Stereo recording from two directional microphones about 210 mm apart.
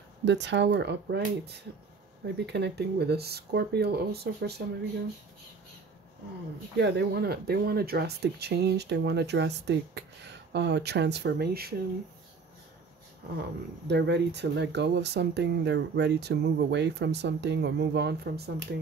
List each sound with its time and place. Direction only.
0.2 s speech: 55° right (ahead or behind)
6.8 s speech: 50° right (ahead or behind)
13.8 s speech: 55° right (ahead or behind)